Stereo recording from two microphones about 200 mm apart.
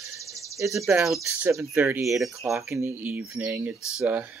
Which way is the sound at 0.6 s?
10° right (ahead or behind).